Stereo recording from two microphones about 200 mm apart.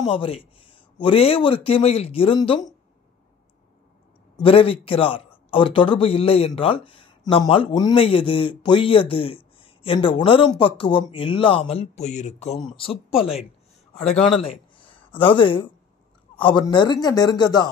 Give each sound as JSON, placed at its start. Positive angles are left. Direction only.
{"t": 0.1, "sound": "a man's voice", "side_deg": 25}
{"t": 4.4, "sound": "a man's voice", "side_deg": 25}
{"t": 14.3, "sound": "a sound", "side_deg": 25}
{"t": 15.1, "sound": "a man's voice", "side_deg": 25}